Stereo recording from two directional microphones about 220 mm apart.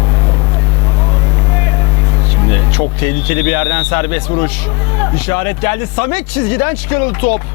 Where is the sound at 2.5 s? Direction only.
10° left (ahead or behind).